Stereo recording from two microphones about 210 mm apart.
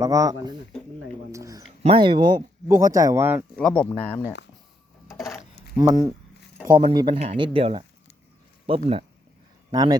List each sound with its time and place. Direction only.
0.0 s speech: 15° right (ahead or behind)
1.3 s a sound: 15° right (ahead or behind)
1.6 s speech: 25° right (ahead or behind); by 3.4 s 10° right (ahead or behind)
3.6 s speech: 5° left (ahead or behind)
5.7 s speech: 15° right (ahead or behind)